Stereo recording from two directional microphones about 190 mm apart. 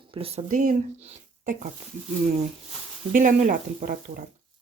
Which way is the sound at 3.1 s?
45° right (ahead or behind).